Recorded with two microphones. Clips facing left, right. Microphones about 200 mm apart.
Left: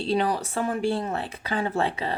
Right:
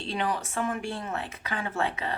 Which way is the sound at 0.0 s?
35° left (ahead or behind).